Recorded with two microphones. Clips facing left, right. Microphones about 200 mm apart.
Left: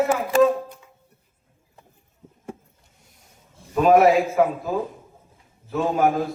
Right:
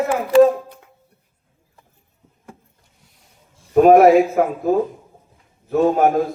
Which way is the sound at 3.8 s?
50° right (ahead or behind).